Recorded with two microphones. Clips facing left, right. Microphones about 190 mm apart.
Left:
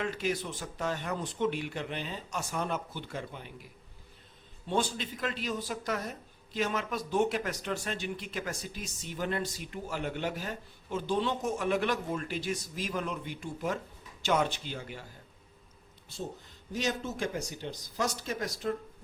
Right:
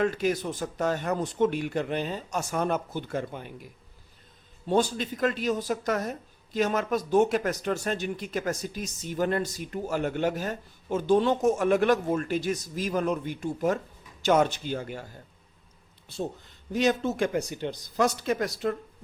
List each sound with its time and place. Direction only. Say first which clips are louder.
0.0 s speech: right 7 dB; 45° right (ahead or behind)
4.7 s speech: right 6 dB; 40° right (ahead or behind)
16.7 s speech: right 8 dB; 65° right (ahead or behind)